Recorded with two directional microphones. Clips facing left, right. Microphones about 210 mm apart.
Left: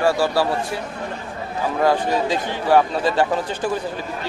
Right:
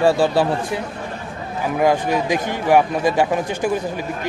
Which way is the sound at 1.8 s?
15° right (ahead or behind).